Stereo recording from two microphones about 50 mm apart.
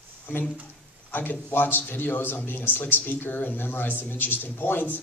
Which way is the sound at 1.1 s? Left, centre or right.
Left.